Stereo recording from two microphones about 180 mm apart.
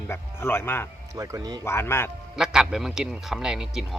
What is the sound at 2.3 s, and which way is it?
A man's voice, 5° right (ahead or behind).